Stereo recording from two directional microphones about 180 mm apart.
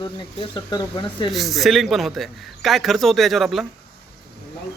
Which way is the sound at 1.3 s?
Centre (ahead or behind).